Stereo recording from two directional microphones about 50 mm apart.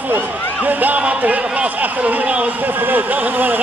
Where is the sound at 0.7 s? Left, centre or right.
Right.